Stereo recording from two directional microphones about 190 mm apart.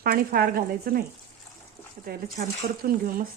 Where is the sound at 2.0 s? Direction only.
50° right (ahead or behind).